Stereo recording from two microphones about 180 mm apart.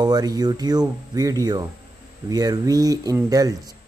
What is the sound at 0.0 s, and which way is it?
Speech, 20° right (ahead or behind).